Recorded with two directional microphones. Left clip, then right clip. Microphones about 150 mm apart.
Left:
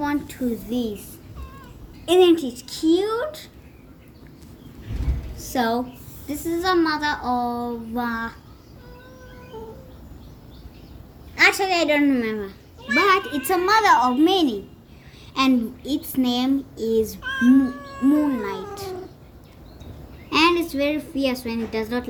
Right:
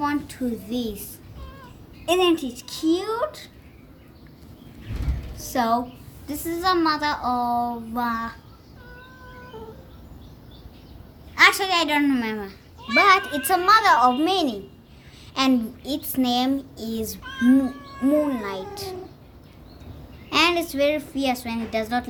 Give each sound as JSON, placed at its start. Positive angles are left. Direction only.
{"t": 0.0, "sound": "a child's voice", "side_deg": -20}
{"t": 2.0, "sound": "a woman's voice", "side_deg": -15}
{"t": 5.4, "sound": "a woman's voice", "side_deg": -15}
{"t": 11.3, "sound": "a child's voice", "side_deg": -30}
{"t": 15.4, "sound": "a child's voice", "side_deg": -25}
{"t": 17.2, "sound": "cat", "side_deg": 10}
{"t": 18.3, "sound": "a child's voice", "side_deg": -20}
{"t": 20.3, "sound": "a child's voice", "side_deg": -20}